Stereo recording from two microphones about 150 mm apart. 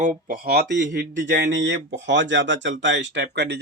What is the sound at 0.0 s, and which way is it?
Speech, 65° right (ahead or behind).